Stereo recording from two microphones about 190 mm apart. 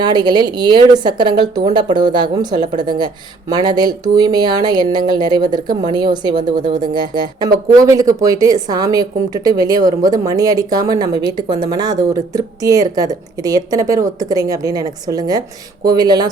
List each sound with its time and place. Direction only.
0.0 s speech: 20° right (ahead or behind)